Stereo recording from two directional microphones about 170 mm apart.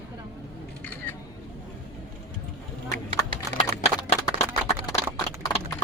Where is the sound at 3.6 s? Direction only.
45° left (ahead or behind).